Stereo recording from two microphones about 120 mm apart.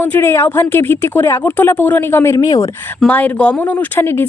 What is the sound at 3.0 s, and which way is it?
Speech, 10° left (ahead or behind).